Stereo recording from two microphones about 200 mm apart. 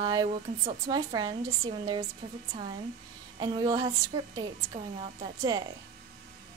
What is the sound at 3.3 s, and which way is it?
Speech, 20° right (ahead or behind).